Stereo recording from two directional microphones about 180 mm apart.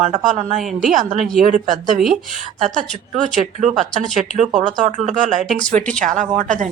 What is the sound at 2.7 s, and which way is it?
Speech, 45° right (ahead or behind).